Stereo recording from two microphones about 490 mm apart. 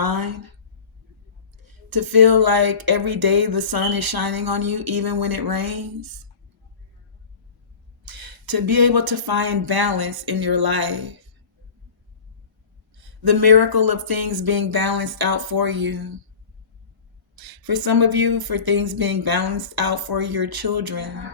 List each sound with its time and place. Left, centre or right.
0.0 s a woman's voice: right
1.6 s speech: right
8.0 s speech: right
13.0 s speech: right
17.3 s speech: right